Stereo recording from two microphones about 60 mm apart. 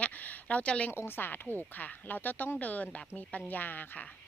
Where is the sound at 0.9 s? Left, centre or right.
Left.